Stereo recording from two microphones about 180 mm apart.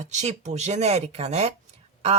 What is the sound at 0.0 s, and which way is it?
A woman's voice, 40° right (ahead or behind).